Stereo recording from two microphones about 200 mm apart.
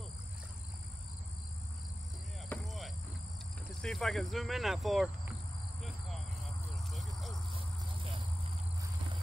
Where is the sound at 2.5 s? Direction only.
Centre (ahead or behind).